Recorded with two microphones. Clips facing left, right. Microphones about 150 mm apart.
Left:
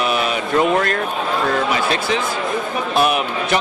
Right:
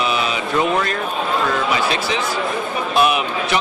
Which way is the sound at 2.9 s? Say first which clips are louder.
Even; 45° left (ahead or behind).